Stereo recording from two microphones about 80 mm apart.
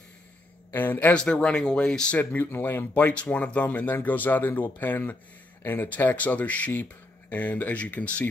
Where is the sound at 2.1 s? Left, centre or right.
Left.